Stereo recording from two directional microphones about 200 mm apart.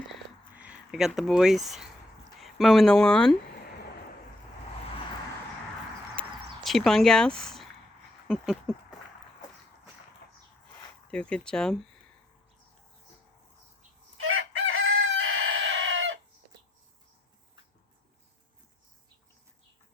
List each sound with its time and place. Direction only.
0.5 s speech: 5° right (ahead or behind)
6.7 s speech: centre (ahead or behind)
8.3 s a sound: centre (ahead or behind)
11.1 s speech: 5° left (ahead or behind)
14.2 s chicken: 90° right; by 16.1 s 75° right (ahead or behind)